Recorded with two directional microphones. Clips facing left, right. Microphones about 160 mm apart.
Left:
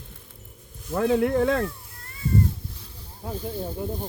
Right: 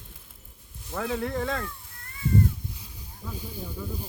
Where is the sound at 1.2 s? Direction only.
55° left (ahead or behind).